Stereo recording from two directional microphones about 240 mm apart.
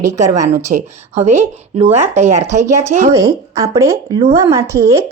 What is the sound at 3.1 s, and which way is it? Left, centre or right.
A woman's voice, centre.